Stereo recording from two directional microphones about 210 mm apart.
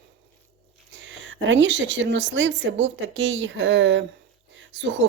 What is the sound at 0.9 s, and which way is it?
Speech, 65° right (ahead or behind).